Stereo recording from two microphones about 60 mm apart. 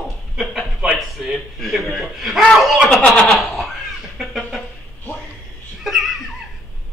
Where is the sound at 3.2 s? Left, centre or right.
Centre.